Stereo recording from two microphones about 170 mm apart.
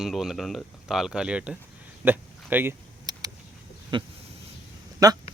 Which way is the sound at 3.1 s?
25° right (ahead or behind).